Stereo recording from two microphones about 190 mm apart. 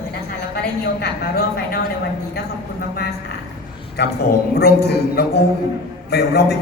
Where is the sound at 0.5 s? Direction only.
55° left (ahead or behind).